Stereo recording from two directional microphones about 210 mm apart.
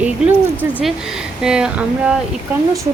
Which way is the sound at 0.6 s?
5° left (ahead or behind).